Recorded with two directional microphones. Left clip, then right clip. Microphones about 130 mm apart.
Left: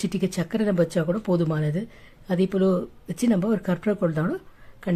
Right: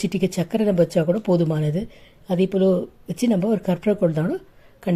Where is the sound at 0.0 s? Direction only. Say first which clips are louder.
Right 4 dB; 10° right (ahead or behind).